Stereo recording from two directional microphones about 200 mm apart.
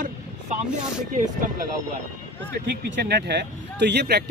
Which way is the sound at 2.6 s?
55° right (ahead or behind).